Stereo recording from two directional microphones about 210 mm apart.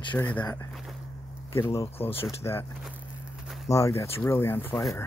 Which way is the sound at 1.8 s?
25° left (ahead or behind).